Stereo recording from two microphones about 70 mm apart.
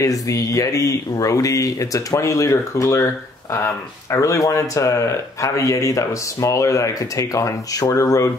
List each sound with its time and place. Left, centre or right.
0.0 s speech: left